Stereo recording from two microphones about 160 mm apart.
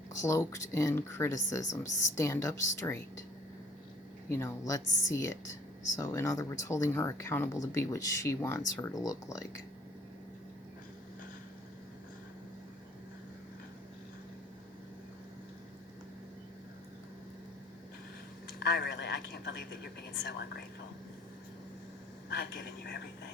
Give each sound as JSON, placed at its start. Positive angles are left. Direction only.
{"t": 0.1, "sound": "speech", "side_deg": 20}
{"t": 4.3, "sound": "speech", "side_deg": 15}
{"t": 18.6, "sound": "a sound", "side_deg": 90}
{"t": 22.3, "sound": "speech", "side_deg": 85}